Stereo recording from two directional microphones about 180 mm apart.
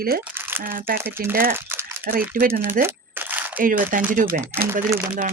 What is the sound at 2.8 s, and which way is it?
Crumpling, 10° right (ahead or behind).